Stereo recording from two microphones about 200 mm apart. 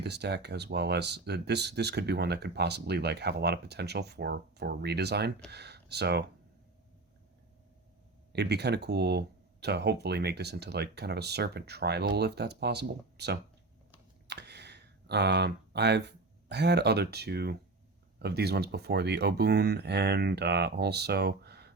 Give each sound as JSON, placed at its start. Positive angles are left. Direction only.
{"t": 0.0, "sound": "speech", "side_deg": -55}
{"t": 8.3, "sound": "speech", "side_deg": -55}